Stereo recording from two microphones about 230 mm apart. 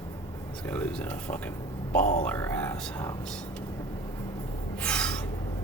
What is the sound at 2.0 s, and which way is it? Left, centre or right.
Speech, left.